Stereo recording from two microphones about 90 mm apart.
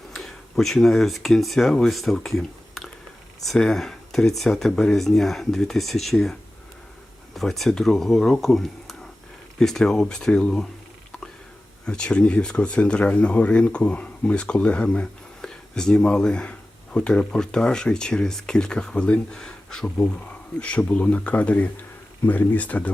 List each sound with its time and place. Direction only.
0.1 s speech: 5° left (ahead or behind)
7.3 s speech: centre (ahead or behind)
11.9 s speech: 10° left (ahead or behind)